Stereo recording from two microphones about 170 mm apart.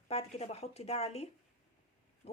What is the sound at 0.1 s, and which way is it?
A woman's voice, 35° left (ahead or behind).